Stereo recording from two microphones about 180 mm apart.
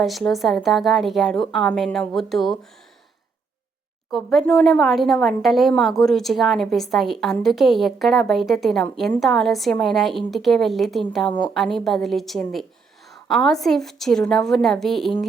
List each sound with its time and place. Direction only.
0.0 s a woman's voice: centre (ahead or behind)
4.1 s a woman's voice: centre (ahead or behind)
11.3 s a woman's voice: 25° left (ahead or behind)
11.5 s a woman's voice: centre (ahead or behind)